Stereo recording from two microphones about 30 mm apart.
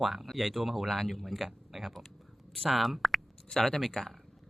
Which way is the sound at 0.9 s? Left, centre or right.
Centre.